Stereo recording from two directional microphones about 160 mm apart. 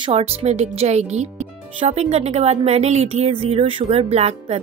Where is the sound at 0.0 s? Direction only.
40° right (ahead or behind).